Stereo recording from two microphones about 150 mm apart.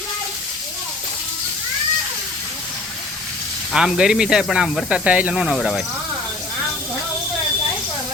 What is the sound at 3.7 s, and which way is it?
Speech, 5° right (ahead or behind).